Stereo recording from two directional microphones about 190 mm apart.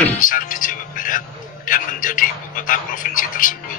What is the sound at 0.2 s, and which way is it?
Music, 45° left (ahead or behind).